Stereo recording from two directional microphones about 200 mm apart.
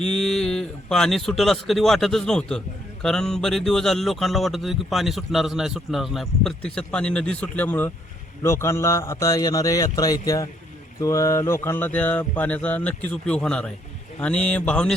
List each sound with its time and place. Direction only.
0.1 s speech: 5° left (ahead or behind)
8.4 s mantra: 15° left (ahead or behind)
14.2 s speech: 5° left (ahead or behind)